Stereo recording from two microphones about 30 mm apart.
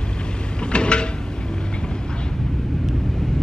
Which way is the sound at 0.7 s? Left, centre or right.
Left.